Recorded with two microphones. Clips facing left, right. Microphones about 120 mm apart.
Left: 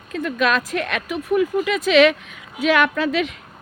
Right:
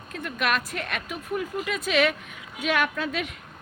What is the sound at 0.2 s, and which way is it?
Speech, 90° left.